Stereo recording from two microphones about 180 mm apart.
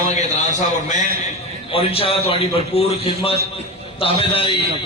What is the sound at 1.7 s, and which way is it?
A man's voice, 30° left (ahead or behind).